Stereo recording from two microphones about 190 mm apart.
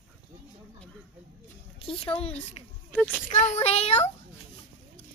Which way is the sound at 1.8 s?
30° left (ahead or behind).